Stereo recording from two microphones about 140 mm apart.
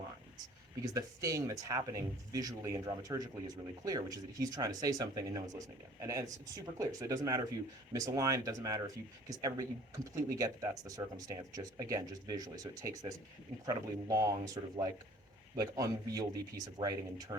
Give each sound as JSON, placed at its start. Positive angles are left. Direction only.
{"t": 0.8, "sound": "speech", "side_deg": -25}